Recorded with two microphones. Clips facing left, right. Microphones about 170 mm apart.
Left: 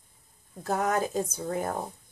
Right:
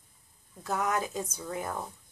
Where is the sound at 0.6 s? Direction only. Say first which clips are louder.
Left 3 dB; 40° left (ahead or behind).